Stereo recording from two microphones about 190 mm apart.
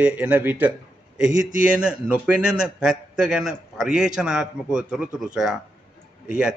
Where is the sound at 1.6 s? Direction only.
5° right (ahead or behind).